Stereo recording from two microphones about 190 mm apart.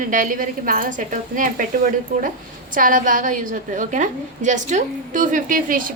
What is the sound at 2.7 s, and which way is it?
A woman's voice, 45° right (ahead or behind).